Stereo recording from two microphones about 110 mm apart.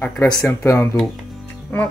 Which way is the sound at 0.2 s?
30° left (ahead or behind).